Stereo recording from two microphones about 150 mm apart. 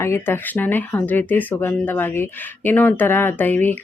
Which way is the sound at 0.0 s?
15° left (ahead or behind).